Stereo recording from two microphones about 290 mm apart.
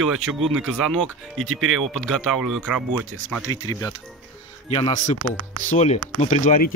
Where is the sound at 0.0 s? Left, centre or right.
Centre.